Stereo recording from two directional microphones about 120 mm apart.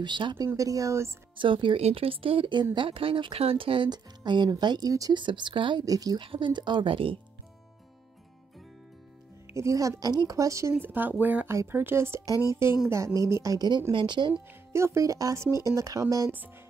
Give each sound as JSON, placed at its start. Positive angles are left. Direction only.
{"t": 0.0, "sound": "speech", "side_deg": -40}
{"t": 0.5, "sound": "speech", "side_deg": -30}
{"t": 1.3, "sound": "speech", "side_deg": -45}
{"t": 5.2, "sound": "speech", "side_deg": -40}
{"t": 5.9, "sound": "speech", "side_deg": -30}
{"t": 6.2, "sound": "speech", "side_deg": -45}
{"t": 9.5, "sound": "speech", "side_deg": -25}
{"t": 10.7, "sound": "speech", "side_deg": -15}
{"t": 14.7, "sound": "speech", "side_deg": -25}